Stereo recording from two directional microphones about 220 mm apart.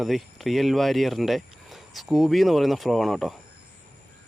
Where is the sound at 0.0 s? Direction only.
Centre (ahead or behind).